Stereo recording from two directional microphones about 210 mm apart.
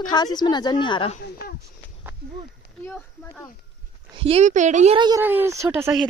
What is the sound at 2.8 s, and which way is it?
Speech, 5° left (ahead or behind).